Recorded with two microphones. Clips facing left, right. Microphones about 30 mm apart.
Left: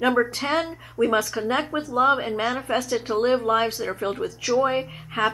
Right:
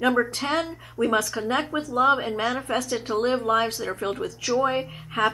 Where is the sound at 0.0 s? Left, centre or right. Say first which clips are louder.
Left 1 dB; centre.